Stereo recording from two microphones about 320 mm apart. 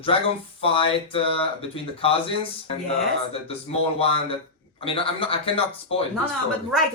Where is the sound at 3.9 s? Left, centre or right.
Centre.